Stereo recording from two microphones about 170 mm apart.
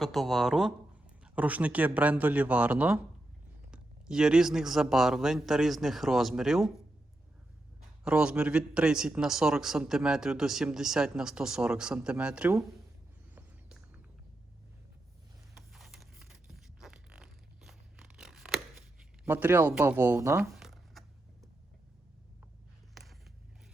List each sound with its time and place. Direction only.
0.0 s a man's voice: centre (ahead or behind)
8.0 s a man's voice: 5° right (ahead or behind)
13.3 s a sound: 10° right (ahead or behind)
15.7 s music: centre (ahead or behind)
17.7 s scissors: 5° right (ahead or behind)
19.2 s speech: 10° right (ahead or behind)
20.5 s shuffling cards: centre (ahead or behind)